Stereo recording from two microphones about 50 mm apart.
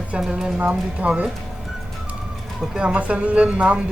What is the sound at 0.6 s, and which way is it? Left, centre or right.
Speech, right.